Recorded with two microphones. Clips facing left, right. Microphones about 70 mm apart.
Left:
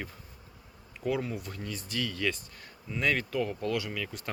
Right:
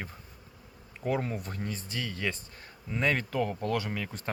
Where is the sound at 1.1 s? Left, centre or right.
Right.